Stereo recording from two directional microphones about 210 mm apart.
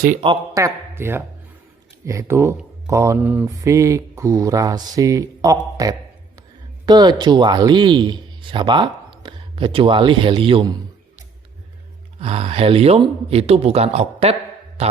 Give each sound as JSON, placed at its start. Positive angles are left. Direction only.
{"t": 0.2, "sound": "a man's voice", "side_deg": -20}
{"t": 12.2, "sound": "a man's voice", "side_deg": -30}